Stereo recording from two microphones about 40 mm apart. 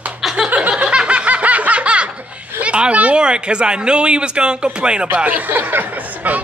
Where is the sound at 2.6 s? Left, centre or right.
Right.